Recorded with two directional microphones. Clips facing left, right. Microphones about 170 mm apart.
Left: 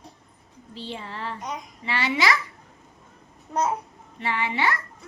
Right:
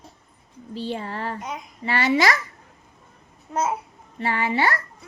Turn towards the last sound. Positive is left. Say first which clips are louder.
# right 3 dB
turn(degrees=-40)  # may be behind; listen again after turning